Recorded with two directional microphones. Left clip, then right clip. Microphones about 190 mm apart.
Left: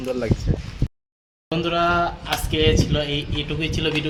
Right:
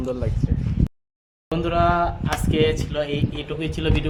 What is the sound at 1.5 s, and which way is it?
Speech, 15° right (ahead or behind).